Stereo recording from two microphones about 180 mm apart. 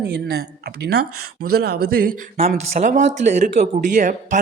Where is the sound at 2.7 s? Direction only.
40° right (ahead or behind).